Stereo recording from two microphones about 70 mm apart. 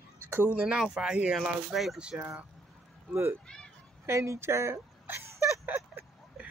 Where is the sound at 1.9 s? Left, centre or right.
Centre.